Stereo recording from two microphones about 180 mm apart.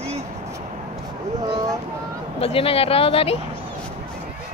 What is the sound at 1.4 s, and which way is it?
Boat, 20° right (ahead or behind).